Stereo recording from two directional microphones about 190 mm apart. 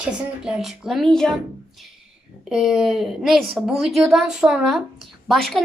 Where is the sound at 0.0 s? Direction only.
5° right (ahead or behind).